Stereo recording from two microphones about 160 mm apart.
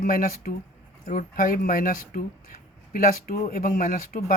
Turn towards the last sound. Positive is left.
turn(degrees=60)  # may be behind; listen again after turning